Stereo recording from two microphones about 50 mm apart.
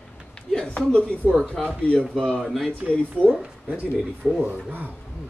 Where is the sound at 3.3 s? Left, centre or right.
Right.